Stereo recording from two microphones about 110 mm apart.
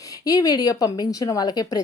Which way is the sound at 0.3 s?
35° left (ahead or behind).